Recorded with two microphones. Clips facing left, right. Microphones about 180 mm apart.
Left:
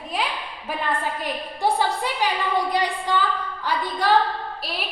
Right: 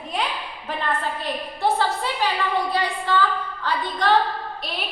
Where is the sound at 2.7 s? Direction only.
15° left (ahead or behind).